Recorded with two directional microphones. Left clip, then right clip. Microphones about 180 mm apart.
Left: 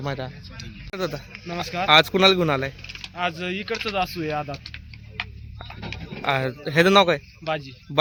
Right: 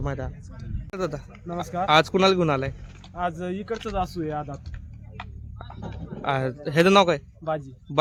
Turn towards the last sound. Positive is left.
turn(degrees=-10)  # may be behind; listen again after turning